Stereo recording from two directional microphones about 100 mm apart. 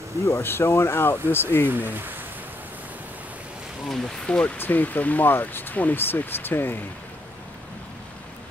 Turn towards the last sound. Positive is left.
turn(degrees=20)  # may be behind; listen again after turning